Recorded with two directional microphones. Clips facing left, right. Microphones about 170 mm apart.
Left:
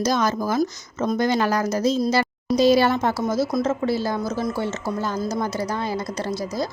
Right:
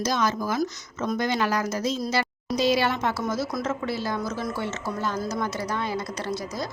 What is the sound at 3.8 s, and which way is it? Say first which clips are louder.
Speech: left 5 dB; 35° left (ahead or behind).